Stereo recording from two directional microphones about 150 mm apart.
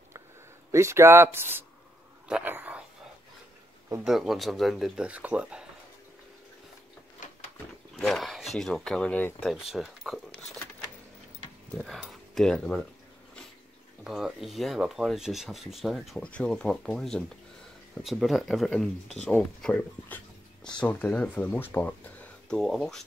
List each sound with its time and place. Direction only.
0.7 s speech: 20° right (ahead or behind)
4.0 s speech: centre (ahead or behind)
7.9 s speech: 5° left (ahead or behind)
9.5 s speech: centre (ahead or behind)
11.7 s speech: centre (ahead or behind)
14.0 s speech: centre (ahead or behind)